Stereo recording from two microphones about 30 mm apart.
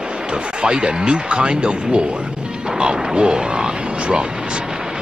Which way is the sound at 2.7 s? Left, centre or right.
Right.